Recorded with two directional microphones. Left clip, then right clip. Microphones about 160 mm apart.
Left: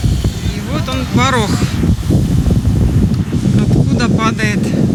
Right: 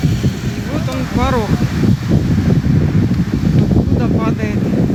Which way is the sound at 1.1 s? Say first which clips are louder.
Left 4 dB; 15° left (ahead or behind).